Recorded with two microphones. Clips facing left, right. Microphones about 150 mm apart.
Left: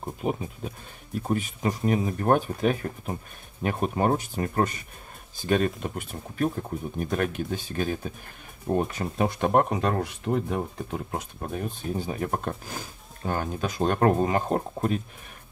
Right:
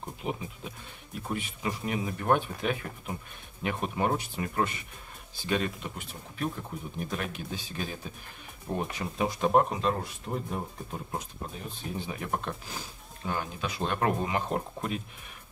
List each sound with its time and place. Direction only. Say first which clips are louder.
0.2 s speech: left 6 dB; 40° left (ahead or behind); by 10.6 s 75° left (ahead or behind)
11.1 s speech: left 4 dB; 60° left (ahead or behind); by 15.0 s 40° left (ahead or behind)